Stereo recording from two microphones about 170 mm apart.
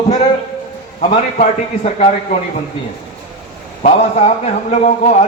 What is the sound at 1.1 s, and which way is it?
A man's voice, 40° left (ahead or behind).